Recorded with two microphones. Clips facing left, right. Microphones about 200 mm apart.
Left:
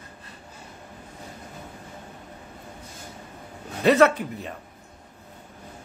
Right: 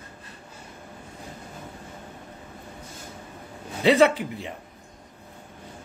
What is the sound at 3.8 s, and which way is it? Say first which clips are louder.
Speech: even; 10° right (ahead or behind).